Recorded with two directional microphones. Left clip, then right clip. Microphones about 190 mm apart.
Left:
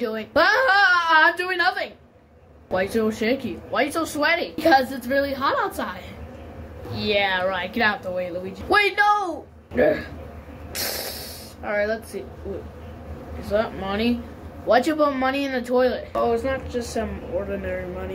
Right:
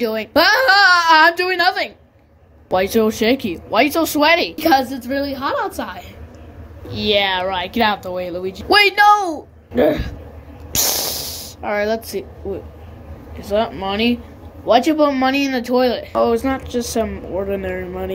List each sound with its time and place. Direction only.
0.0 s speech: 30° right (ahead or behind)
6.9 s speech: 30° right (ahead or behind)
10.7 s hiss: 30° right (ahead or behind)
11.6 s a woman's voice: 30° right (ahead or behind)
13.5 s speech: 25° right (ahead or behind)